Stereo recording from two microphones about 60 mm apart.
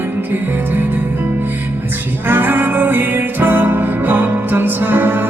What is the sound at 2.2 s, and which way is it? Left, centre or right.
Music, right.